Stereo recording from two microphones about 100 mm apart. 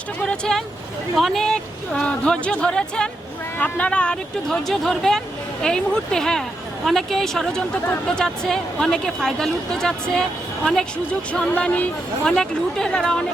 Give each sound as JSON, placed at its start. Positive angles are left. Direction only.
{"t": 0.3, "sound": "a woman's voice", "side_deg": 5}
{"t": 12.2, "sound": "a woman's voice", "side_deg": 5}